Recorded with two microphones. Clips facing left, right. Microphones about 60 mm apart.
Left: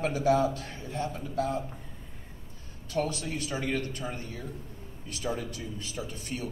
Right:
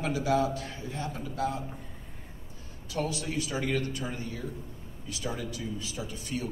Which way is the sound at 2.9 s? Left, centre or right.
Left.